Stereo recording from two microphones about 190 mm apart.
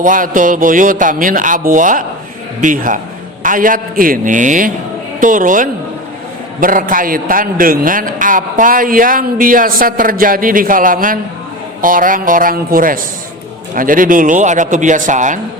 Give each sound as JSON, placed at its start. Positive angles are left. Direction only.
{"t": 0.0, "sound": "a man's voice", "side_deg": -45}